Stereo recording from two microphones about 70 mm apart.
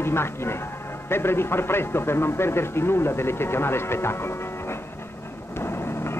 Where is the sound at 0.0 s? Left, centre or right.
Left.